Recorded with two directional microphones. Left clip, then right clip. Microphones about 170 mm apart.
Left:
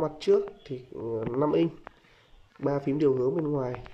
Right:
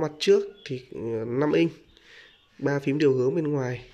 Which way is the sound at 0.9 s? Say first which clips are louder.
Right 2 dB; 30° right (ahead or behind).